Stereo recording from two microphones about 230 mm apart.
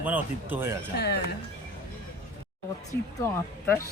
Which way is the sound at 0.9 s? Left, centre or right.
Left.